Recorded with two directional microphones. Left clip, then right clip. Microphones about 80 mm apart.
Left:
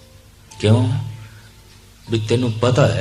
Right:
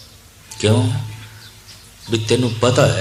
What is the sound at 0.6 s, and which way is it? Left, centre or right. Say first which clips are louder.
Speech: right 1 dB; right.